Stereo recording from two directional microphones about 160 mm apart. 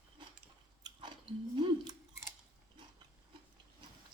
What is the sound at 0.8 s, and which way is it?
Chewing, 30° right (ahead or behind).